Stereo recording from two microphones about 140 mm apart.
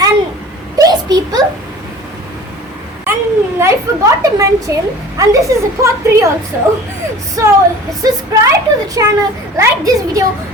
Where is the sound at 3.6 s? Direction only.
25° right (ahead or behind).